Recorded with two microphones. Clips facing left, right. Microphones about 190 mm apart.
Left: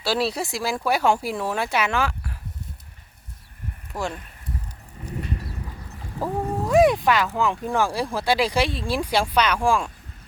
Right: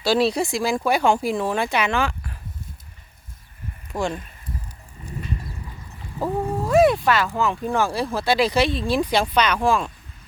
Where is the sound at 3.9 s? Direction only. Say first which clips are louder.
Right 4 dB; 20° right (ahead or behind).